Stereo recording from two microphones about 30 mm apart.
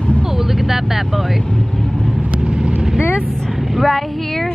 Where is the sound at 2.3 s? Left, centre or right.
Right.